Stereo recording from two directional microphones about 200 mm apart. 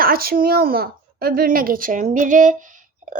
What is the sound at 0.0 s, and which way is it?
A woman's voice, 50° right (ahead or behind).